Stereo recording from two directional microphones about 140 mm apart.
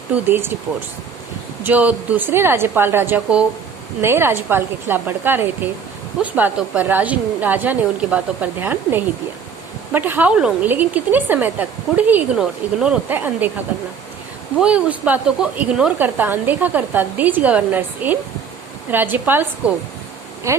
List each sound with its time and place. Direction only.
0.1 s speech: 15° right (ahead or behind)
1.6 s speech: 10° right (ahead or behind)
14.6 s speech: 10° right (ahead or behind)
20.5 s speech: 20° right (ahead or behind)